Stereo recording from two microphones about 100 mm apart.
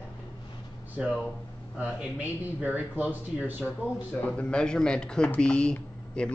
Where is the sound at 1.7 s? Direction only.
15° right (ahead or behind).